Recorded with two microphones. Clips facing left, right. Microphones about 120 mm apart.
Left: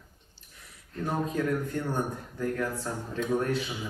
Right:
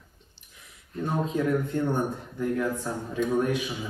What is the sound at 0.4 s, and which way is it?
Speech, 20° right (ahead or behind).